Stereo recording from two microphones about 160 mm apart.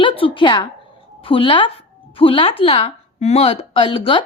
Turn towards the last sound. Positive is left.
turn(degrees=35)  # may be behind; listen again after turning